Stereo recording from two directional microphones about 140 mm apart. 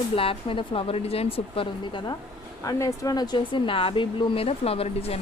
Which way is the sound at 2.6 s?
25° left (ahead or behind).